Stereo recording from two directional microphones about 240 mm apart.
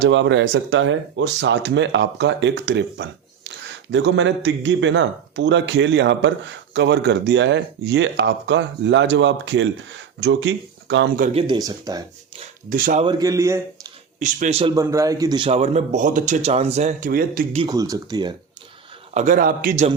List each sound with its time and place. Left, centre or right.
0.0 s speech: right
11.2 s speech: right
12.7 s a man's voice: right
13.1 s speech: centre
14.2 s a man's voice: right
14.8 s a man's voice: centre; by 17.6 s right
17.6 s speech: centre
19.1 s a man's voice: right